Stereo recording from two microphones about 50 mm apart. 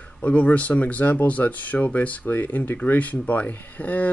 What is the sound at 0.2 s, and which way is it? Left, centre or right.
Speech, left.